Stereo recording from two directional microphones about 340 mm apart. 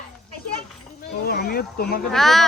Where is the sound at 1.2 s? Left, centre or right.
Left.